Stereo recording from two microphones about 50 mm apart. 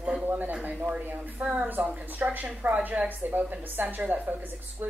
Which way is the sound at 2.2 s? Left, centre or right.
Right.